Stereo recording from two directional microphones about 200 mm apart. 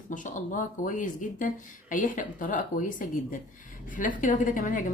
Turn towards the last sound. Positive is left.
turn(degrees=40)  # may be behind; listen again after turning